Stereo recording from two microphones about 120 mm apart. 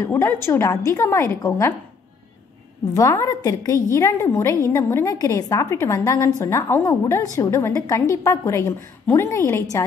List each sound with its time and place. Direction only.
0.0 s a woman's voice: 20° left (ahead or behind)
3.0 s a woman's voice: 25° left (ahead or behind)